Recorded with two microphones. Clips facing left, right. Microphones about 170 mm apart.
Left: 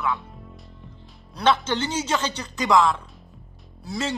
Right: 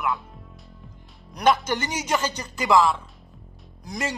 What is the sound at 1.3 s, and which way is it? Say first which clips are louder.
Speech: even; 10° right (ahead or behind).